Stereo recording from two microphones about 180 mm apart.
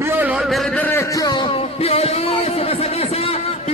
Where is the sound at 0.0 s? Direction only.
10° right (ahead or behind).